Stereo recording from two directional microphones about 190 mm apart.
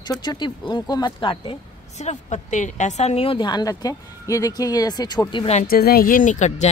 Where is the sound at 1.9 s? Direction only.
40° left (ahead or behind).